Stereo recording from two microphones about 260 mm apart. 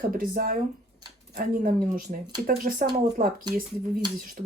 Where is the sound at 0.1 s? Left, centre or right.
Right.